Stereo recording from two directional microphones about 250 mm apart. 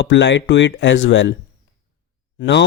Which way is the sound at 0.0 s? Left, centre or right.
Left.